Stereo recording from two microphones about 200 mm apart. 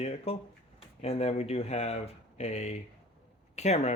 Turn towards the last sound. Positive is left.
turn(degrees=35)  # may be behind; listen again after turning